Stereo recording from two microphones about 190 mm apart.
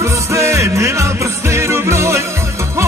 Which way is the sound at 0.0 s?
15° right (ahead or behind).